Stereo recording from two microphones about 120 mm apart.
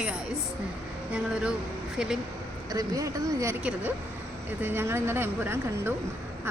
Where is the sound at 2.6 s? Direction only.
30° right (ahead or behind).